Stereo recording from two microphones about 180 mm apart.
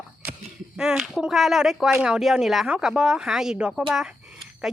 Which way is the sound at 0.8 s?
5° right (ahead or behind).